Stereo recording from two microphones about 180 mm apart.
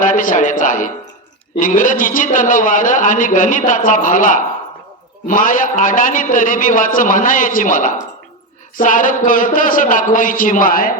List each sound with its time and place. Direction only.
0.0 s a man's voice: 45° left (ahead or behind)